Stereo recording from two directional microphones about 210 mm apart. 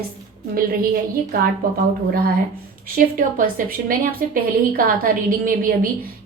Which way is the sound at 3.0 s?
40° right (ahead or behind).